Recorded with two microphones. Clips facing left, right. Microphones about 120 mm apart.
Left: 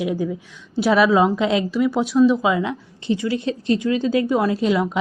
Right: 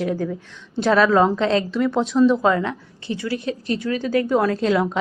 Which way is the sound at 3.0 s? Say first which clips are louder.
Left 3 dB; 20° left (ahead or behind).